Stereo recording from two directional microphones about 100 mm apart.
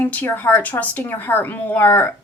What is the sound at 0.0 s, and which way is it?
A woman's voice, 20° left (ahead or behind).